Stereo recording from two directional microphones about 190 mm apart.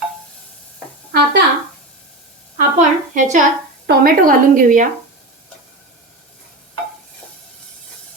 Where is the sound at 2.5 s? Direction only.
40° right (ahead or behind).